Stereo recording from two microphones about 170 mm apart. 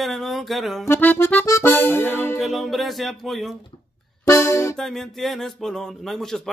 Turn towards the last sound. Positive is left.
turn(degrees=0)  # may be behind; listen again after turning